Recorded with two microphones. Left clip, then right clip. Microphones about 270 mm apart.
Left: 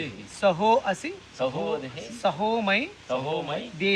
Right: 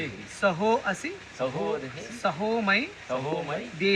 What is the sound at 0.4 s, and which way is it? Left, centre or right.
Speech, left.